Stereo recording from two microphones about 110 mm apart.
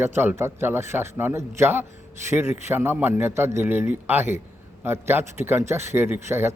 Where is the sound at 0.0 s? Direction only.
20° right (ahead or behind).